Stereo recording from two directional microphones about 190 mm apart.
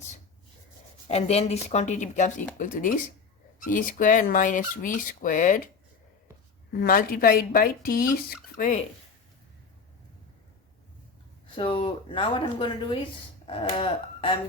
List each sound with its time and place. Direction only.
1.0 s speech: 35° left (ahead or behind)
6.7 s speech: 50° left (ahead or behind)
11.5 s speech: 25° left (ahead or behind)